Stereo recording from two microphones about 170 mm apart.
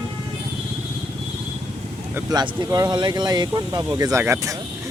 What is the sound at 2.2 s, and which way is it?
Speech, 25° right (ahead or behind).